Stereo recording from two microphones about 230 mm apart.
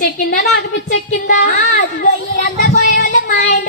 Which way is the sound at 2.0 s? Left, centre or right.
Left.